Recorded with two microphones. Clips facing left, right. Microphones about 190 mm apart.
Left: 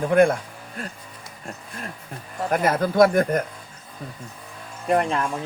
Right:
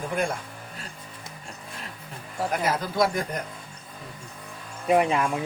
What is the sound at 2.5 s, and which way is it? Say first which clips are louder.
Speech: left 7 dB; 50° left (ahead or behind).